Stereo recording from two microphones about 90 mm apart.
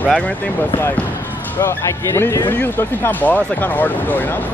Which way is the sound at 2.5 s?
20° left (ahead or behind).